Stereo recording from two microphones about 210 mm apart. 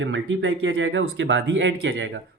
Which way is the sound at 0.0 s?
65° right (ahead or behind).